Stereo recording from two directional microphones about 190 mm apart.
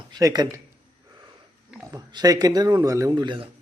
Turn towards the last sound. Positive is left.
turn(degrees=-25)  # may be behind; listen again after turning